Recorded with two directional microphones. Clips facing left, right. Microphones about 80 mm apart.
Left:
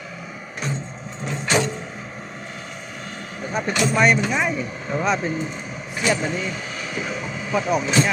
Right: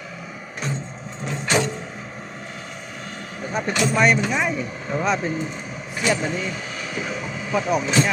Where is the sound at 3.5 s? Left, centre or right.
Left.